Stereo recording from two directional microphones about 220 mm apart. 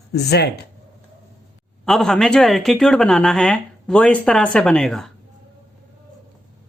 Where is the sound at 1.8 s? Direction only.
Centre (ahead or behind).